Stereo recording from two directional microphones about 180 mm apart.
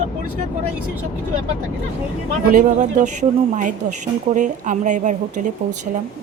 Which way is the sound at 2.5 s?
45° right (ahead or behind).